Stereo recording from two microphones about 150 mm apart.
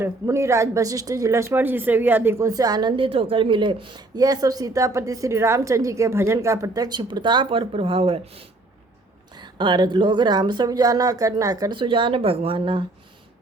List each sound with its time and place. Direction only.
0.0 s speech: 20° right (ahead or behind); by 12.8 s 35° right (ahead or behind)